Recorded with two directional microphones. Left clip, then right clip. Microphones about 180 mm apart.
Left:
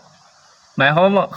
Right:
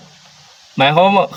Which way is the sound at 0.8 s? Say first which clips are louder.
Right 3 dB; 20° right (ahead or behind).